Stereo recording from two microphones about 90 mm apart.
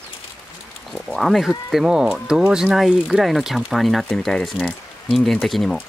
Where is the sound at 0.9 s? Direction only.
Centre (ahead or behind).